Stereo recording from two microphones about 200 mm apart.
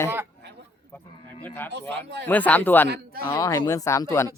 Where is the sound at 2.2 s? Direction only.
5° left (ahead or behind).